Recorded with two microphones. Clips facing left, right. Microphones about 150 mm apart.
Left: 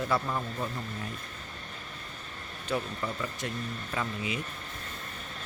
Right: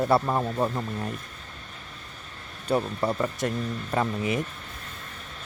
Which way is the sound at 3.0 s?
60° right (ahead or behind).